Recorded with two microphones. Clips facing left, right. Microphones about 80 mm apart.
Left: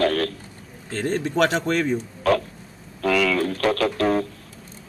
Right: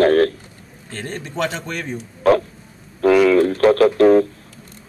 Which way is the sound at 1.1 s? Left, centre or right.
Left.